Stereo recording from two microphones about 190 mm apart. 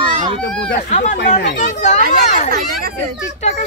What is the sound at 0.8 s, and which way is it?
Speech, 40° left (ahead or behind).